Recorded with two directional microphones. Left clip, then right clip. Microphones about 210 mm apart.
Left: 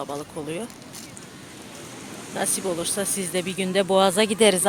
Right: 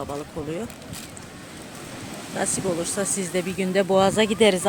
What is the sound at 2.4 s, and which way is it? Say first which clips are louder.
Speech: right 1 dB; centre (ahead or behind).